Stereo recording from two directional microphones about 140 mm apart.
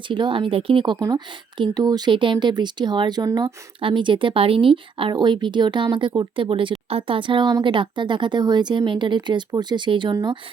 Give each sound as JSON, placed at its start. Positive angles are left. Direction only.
{"t": 0.1, "sound": "speech", "side_deg": -35}
{"t": 0.9, "sound": "speech", "side_deg": -25}